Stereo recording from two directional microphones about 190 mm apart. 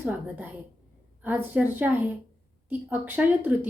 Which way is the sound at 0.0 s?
10° right (ahead or behind).